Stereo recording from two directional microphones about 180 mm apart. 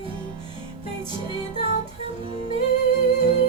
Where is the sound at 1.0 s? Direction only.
30° right (ahead or behind).